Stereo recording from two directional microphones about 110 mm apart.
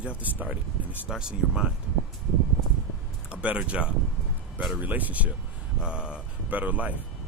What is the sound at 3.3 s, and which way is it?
Speech, 10° right (ahead or behind).